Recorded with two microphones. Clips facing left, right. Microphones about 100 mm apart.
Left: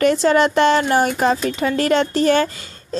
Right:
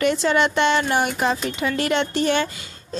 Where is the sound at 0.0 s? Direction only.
40° left (ahead or behind).